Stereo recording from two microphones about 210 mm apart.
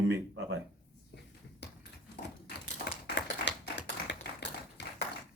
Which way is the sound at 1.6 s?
55° left (ahead or behind).